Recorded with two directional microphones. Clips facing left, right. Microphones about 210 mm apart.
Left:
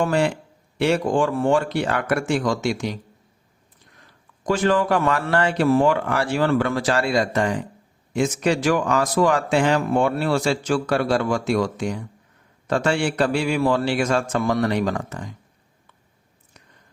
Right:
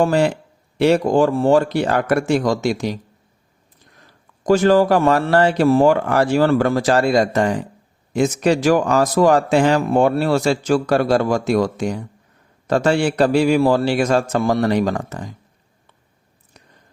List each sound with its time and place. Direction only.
0.0 s speech: 40° right (ahead or behind)
4.4 s speech: 40° right (ahead or behind)